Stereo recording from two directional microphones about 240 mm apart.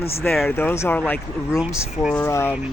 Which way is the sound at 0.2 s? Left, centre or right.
Centre.